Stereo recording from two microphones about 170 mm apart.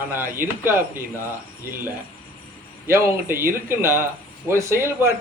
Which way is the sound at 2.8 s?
15° right (ahead or behind).